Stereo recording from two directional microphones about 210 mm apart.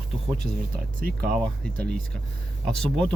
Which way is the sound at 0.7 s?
45° right (ahead or behind).